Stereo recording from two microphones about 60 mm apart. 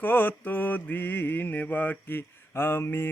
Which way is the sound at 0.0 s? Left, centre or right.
Left.